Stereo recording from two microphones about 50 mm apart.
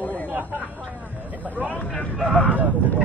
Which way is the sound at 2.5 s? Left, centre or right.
Right.